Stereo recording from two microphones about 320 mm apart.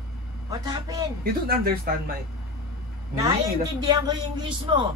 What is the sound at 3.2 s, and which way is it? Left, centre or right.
A man's voice, centre.